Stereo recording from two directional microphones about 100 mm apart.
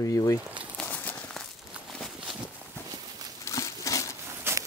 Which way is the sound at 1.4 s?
5° left (ahead or behind).